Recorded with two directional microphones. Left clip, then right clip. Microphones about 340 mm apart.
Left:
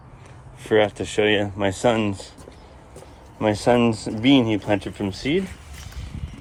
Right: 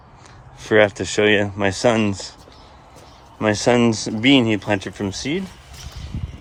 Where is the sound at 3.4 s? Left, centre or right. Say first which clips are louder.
Right 2 dB; centre.